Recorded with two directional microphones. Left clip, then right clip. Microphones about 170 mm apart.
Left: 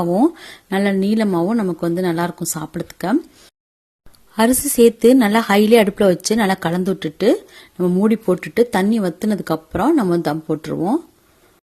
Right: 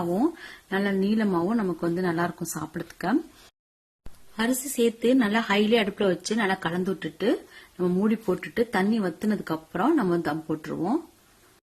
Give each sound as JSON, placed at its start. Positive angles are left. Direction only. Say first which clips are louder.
{"t": 0.1, "sound": "speech", "louder": "left 9 dB", "side_deg": 45}
{"t": 4.4, "sound": "a woman's voice", "louder": "left 12 dB", "side_deg": 55}
{"t": 7.8, "sound": "speech", "louder": "left 8 dB", "side_deg": 30}